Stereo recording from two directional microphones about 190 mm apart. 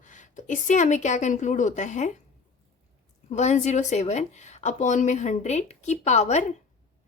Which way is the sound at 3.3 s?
35° left (ahead or behind).